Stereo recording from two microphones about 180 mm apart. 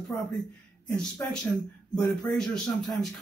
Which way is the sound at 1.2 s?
10° left (ahead or behind).